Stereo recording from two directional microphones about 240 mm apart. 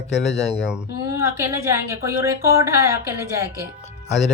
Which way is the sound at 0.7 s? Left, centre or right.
Centre.